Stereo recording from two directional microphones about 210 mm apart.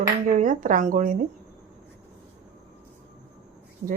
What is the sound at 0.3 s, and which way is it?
Speech, 40° right (ahead or behind).